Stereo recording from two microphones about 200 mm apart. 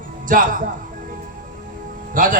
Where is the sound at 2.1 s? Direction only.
40° right (ahead or behind).